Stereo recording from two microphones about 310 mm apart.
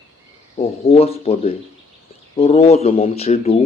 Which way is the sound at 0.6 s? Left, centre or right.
Centre.